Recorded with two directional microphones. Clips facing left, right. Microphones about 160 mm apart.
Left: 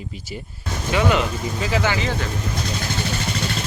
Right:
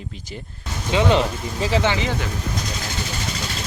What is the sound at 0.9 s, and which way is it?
Speech, 30° right (ahead or behind).